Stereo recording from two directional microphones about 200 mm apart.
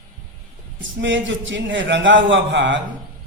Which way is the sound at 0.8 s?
65° right (ahead or behind).